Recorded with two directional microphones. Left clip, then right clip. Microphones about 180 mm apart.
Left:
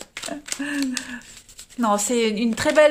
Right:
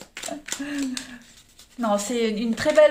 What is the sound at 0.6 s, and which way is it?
Speech, 45° left (ahead or behind).